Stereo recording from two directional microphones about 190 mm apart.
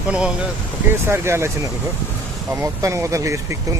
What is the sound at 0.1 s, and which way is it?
Speech, 5° right (ahead or behind).